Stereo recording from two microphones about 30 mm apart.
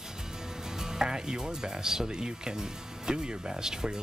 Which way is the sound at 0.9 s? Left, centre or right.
Right.